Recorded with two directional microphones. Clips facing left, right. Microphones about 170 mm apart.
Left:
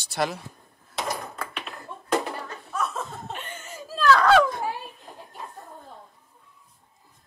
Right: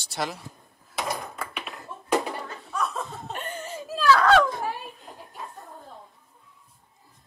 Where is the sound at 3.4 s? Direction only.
35° right (ahead or behind).